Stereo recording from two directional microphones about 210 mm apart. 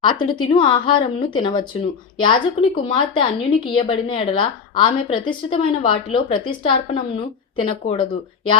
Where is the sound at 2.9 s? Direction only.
20° left (ahead or behind).